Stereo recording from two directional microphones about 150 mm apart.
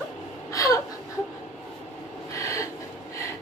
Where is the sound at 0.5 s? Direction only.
20° left (ahead or behind).